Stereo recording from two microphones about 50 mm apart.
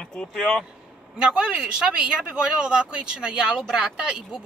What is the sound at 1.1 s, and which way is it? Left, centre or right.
Speech, right.